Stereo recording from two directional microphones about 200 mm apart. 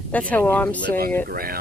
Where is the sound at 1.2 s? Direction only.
50° right (ahead or behind).